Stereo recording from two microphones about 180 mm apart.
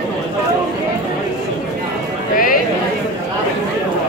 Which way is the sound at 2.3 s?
50° left (ahead or behind).